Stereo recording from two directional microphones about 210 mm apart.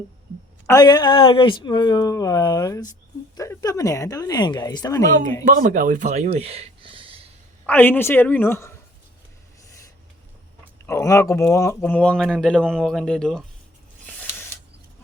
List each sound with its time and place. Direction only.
0.7 s a woman's voice: 20° left (ahead or behind)
5.5 s speech: 40° right (ahead or behind)
7.7 s a woman's voice: 10° left (ahead or behind)
10.8 s speech: 15° left (ahead or behind)
14.1 s a sound: 5° left (ahead or behind)